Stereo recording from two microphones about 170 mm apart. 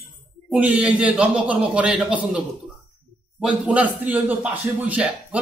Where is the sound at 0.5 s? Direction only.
5° right (ahead or behind).